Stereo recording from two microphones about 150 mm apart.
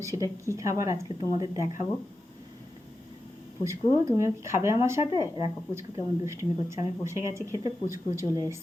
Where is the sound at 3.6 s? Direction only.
20° right (ahead or behind).